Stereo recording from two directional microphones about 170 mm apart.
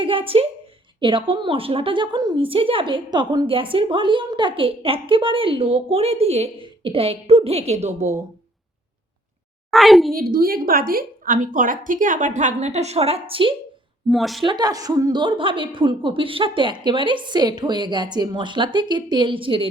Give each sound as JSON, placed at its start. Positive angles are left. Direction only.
{"t": 0.0, "sound": "a woman's voice", "side_deg": -30}
{"t": 9.7, "sound": "a woman's voice", "side_deg": 0}
{"t": 10.1, "sound": "a woman's voice", "side_deg": -60}
{"t": 14.1, "sound": "a woman's voice", "side_deg": 0}
{"t": 14.4, "sound": "a woman's voice", "side_deg": -25}